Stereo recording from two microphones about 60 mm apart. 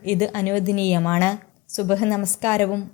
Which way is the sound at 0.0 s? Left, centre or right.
Left.